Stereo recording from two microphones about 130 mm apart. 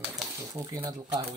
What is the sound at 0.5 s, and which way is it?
Speech, 25° right (ahead or behind).